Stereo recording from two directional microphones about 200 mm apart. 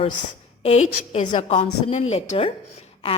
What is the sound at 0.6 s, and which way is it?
Speech, 30° left (ahead or behind).